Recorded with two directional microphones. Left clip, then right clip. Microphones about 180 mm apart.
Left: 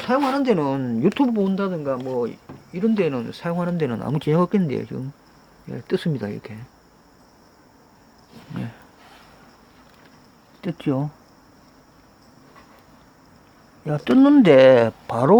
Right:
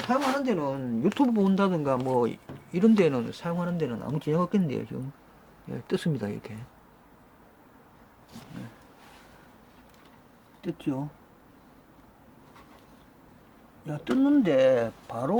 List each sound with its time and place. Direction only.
0.1 s speech: 55° left (ahead or behind)
1.3 s speech: 10° right (ahead or behind); by 2.9 s 25° right (ahead or behind)
2.9 s speech: 5° right (ahead or behind)
3.2 s speech: 20° left (ahead or behind)
10.6 s speech: 55° left (ahead or behind)
13.8 s speech: 50° left (ahead or behind)